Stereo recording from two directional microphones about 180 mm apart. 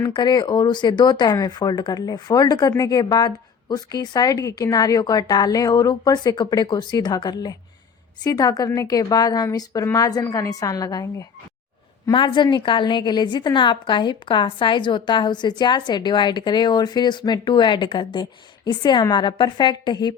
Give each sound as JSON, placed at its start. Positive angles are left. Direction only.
{"t": 0.0, "sound": "a woman's voice", "side_deg": 25}